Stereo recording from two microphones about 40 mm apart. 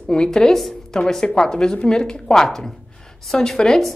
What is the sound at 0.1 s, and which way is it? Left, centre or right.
Speech, centre.